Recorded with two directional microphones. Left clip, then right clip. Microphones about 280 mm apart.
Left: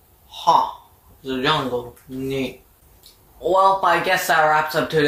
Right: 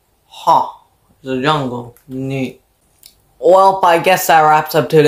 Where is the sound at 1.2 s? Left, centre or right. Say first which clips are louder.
Right 5 dB; right.